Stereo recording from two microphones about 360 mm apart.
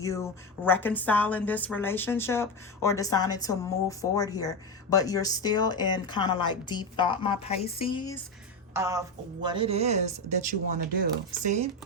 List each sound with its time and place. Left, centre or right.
0.0 s a woman's voice: centre
8.7 s a woman's voice: centre